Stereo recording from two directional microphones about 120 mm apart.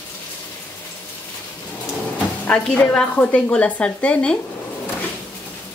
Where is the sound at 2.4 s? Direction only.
10° left (ahead or behind).